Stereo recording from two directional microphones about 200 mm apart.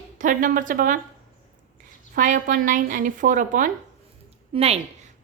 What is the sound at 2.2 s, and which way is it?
A woman's voice, 40° right (ahead or behind).